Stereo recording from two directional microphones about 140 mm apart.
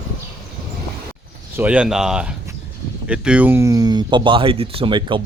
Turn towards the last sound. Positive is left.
turn(degrees=-35)  # may be behind; listen again after turning